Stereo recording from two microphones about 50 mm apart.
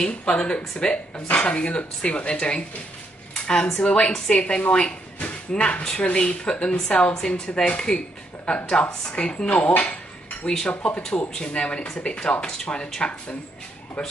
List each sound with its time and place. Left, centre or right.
0.0 s speech: centre
3.3 s a sound: centre
3.8 s speech: left
7.2 s speech: centre
10.4 s speech: centre